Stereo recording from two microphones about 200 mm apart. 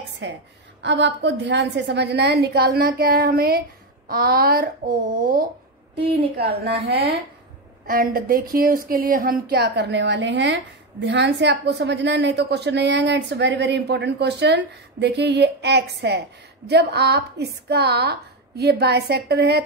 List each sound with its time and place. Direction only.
0.2 s a woman's voice: 60° right (ahead or behind)